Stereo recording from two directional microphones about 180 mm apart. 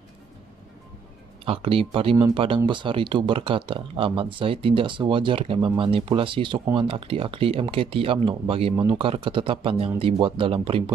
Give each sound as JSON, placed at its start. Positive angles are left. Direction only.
{"t": 1.4, "sound": "speech", "side_deg": -30}